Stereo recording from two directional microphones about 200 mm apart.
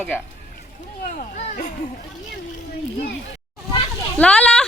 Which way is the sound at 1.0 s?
40° left (ahead or behind).